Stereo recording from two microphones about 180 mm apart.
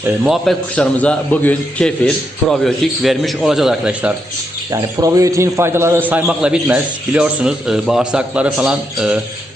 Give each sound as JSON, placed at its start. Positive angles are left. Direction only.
{"t": 0.0, "sound": "a man's voice", "side_deg": -5}
{"t": 4.7, "sound": "a man's voice", "side_deg": -20}